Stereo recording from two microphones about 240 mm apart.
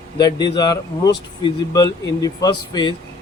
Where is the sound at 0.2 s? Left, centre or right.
Centre.